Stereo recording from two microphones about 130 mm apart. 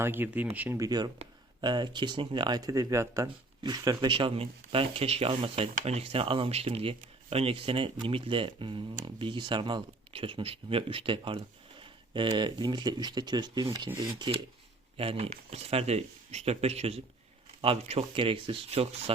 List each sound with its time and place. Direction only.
0.0 s speech: 15° right (ahead or behind)
0.8 s speech: 30° right (ahead or behind)
14.9 s speech: 45° right (ahead or behind)